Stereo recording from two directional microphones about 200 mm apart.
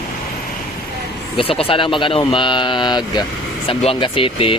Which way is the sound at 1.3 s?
30° left (ahead or behind).